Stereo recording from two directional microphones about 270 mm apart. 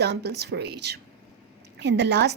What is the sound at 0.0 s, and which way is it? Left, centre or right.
A woman's voice, right.